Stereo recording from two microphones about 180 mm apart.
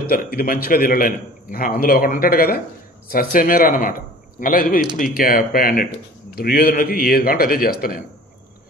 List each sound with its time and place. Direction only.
0.1 s a man's voice: 55° left (ahead or behind)